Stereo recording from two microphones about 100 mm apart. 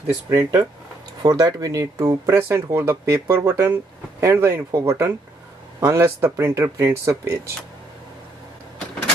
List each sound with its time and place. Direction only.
0.3 s speech: 30° right (ahead or behind)